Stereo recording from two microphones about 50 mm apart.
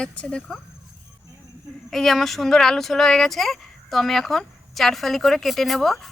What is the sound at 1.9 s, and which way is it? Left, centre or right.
Speech, centre.